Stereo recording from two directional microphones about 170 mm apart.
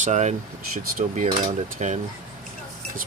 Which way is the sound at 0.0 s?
45° right (ahead or behind).